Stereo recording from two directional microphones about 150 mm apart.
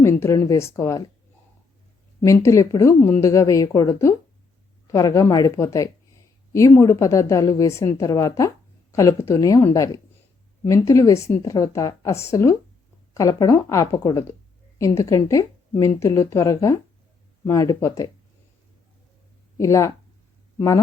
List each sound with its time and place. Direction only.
0.0 s a woman's voice: 20° left (ahead or behind)
2.2 s a woman's voice: 20° left (ahead or behind)
19.5 s a woman's voice: 20° left (ahead or behind)